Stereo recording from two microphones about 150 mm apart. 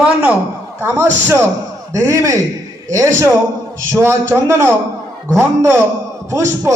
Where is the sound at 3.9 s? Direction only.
15° right (ahead or behind).